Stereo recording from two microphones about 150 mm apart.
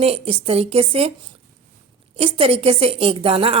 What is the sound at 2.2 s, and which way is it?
A woman's voice, 40° right (ahead or behind).